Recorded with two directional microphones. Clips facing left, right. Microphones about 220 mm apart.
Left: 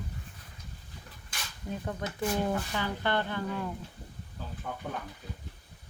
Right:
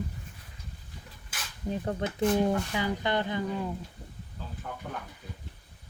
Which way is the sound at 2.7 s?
15° right (ahead or behind).